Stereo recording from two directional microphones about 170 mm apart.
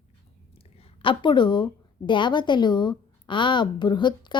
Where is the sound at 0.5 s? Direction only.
35° left (ahead or behind).